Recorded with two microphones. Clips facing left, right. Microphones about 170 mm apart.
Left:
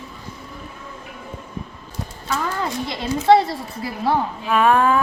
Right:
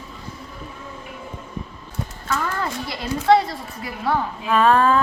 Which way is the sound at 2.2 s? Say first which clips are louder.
Left 1 dB; 15° left (ahead or behind).